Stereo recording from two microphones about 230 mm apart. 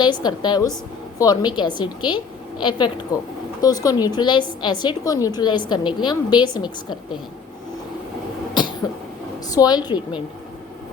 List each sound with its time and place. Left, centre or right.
0.0 s a woman's voice: centre
9.6 s a woman's voice: centre